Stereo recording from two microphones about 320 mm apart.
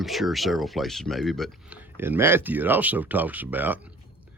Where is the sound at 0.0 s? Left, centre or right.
Centre.